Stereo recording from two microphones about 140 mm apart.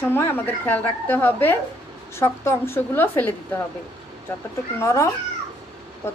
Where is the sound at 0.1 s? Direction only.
15° left (ahead or behind).